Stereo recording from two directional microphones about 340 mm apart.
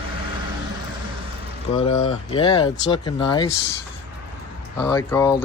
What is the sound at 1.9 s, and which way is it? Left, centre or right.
Speech, left.